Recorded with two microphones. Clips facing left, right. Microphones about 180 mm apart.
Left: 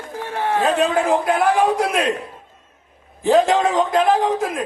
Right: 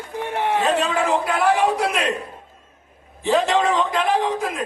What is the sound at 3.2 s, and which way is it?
A man's voice, 50° left (ahead or behind).